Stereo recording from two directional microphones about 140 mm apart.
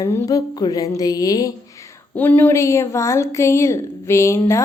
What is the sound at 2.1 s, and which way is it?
Speech, 10° left (ahead or behind).